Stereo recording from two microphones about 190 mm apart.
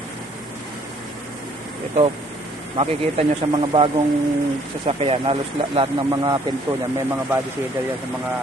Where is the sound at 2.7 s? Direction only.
30° right (ahead or behind).